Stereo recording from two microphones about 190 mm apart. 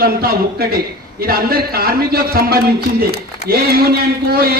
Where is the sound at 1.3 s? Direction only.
55° right (ahead or behind).